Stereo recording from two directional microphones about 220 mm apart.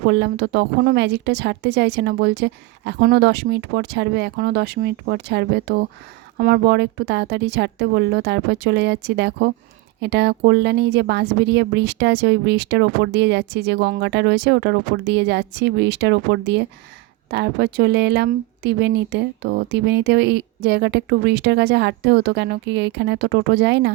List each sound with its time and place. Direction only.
0.0 s a woman's voice: 50° right (ahead or behind)